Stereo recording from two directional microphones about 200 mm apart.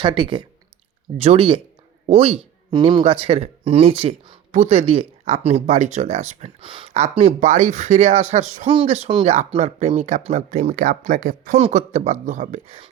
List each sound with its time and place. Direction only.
0.0 s speech: 25° right (ahead or behind)